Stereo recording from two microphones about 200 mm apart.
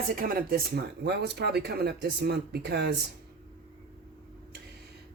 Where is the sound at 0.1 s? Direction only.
45° right (ahead or behind).